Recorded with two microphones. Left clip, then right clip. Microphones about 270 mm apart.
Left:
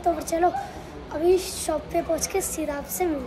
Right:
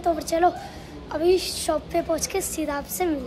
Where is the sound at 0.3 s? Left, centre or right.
Right.